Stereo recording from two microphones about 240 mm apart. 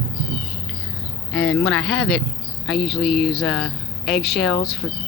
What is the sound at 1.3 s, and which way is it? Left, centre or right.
Speech, centre.